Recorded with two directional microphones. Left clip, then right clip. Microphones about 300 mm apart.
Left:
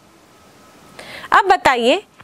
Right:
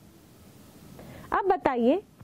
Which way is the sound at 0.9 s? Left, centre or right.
Centre.